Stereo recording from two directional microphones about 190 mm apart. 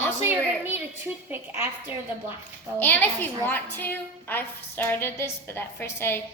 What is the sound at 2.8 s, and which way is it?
A woman's voice, 10° left (ahead or behind).